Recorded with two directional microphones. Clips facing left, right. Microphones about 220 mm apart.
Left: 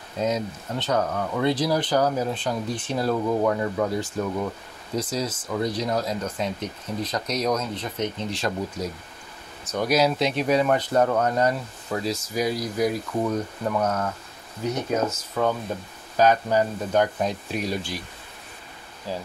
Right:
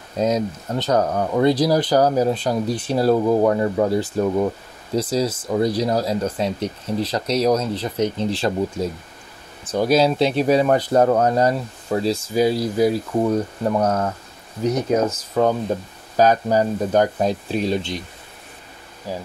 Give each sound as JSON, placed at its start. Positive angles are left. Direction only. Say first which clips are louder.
{"t": 0.2, "sound": "speech", "louder": "right 5 dB", "side_deg": -40}
{"t": 19.1, "sound": "speech", "louder": "right 2 dB", "side_deg": -15}